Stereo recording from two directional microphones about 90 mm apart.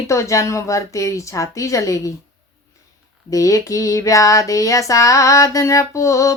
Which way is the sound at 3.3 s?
40° left (ahead or behind).